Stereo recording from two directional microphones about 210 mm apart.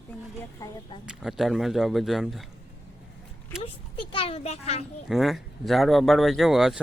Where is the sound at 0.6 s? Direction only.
25° left (ahead or behind).